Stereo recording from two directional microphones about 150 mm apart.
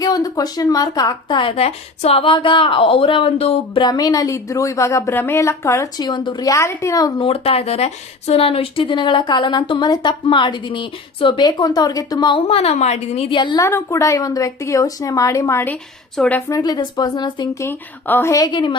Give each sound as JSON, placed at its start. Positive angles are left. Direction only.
{"t": 0.0, "sound": "speech", "side_deg": 25}
{"t": 3.8, "sound": "speech", "side_deg": 25}
{"t": 7.2, "sound": "speech", "side_deg": 40}
{"t": 13.3, "sound": "speech", "side_deg": 30}
{"t": 13.6, "sound": "speech", "side_deg": 20}
{"t": 16.5, "sound": "speech", "side_deg": 25}